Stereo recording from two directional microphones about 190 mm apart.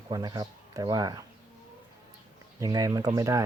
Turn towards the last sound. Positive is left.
turn(degrees=-20)  # may be behind; listen again after turning